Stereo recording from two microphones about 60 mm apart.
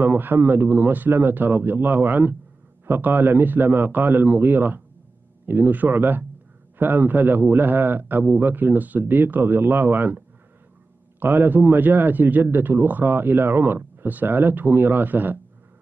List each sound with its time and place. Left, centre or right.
0.0 s a man's voice: right
11.1 s a man's voice: right